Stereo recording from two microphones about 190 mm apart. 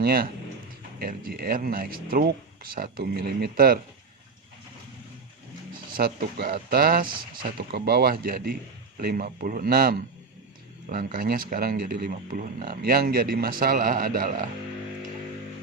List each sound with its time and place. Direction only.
0.0 s speech: 50° right (ahead or behind)
5.9 s speech: 50° right (ahead or behind)